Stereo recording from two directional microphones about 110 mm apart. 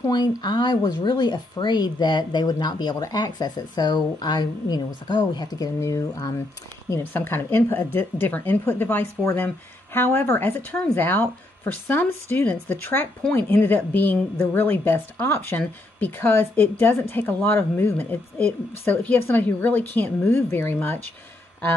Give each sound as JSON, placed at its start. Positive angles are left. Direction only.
{"t": 0.4, "sound": "speech", "side_deg": 40}
{"t": 5.8, "sound": "speech", "side_deg": 30}
{"t": 6.9, "sound": "speech", "side_deg": 20}